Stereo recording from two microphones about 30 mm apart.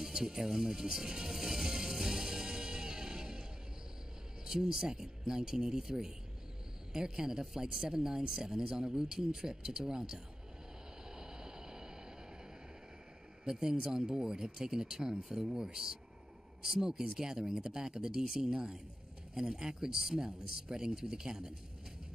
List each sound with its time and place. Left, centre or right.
0.0 s music: centre
4.5 s a man's voice: centre
11.1 s a sound: right
13.5 s a man's voice: right